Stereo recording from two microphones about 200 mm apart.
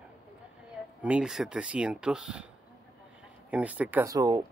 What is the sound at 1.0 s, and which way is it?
Speech, 5° right (ahead or behind).